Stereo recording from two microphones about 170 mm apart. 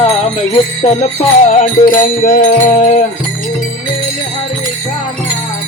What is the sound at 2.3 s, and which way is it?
Music, 50° left (ahead or behind).